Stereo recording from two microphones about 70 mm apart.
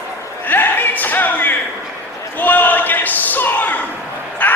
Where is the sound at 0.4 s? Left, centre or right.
Left.